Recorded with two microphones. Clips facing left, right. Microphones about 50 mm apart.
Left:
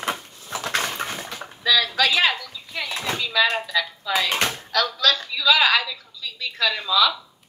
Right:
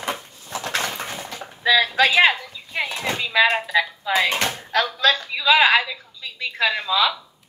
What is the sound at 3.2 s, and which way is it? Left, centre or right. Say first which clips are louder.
A woman's voice: right 3 dB; right.